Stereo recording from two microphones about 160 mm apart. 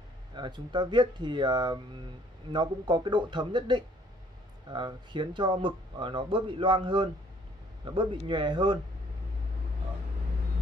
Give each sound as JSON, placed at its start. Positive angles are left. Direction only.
{"t": 0.3, "sound": "speech", "side_deg": -30}